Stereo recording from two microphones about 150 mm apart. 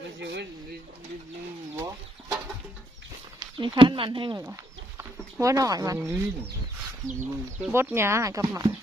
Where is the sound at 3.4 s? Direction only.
30° right (ahead or behind).